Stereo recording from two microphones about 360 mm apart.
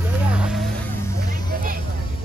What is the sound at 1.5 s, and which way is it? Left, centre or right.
Vehicle, right.